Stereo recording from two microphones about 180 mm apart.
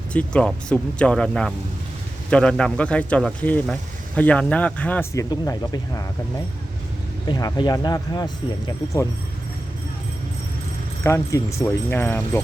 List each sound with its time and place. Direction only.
0.1 s speech: 5° left (ahead or behind)
5.3 s speech: 20° left (ahead or behind)
7.3 s speech: 20° left (ahead or behind)
11.0 s speech: 15° left (ahead or behind)